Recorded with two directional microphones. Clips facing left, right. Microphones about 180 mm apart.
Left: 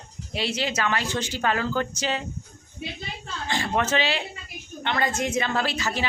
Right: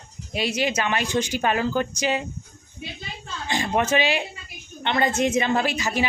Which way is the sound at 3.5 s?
15° right (ahead or behind).